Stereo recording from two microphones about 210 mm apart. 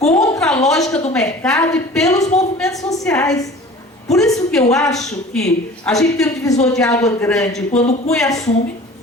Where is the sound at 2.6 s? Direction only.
15° left (ahead or behind).